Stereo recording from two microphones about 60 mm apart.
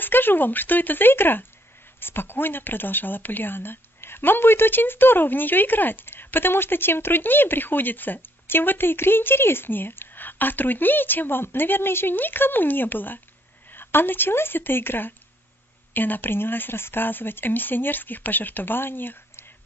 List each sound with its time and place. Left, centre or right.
0.0 s speech: left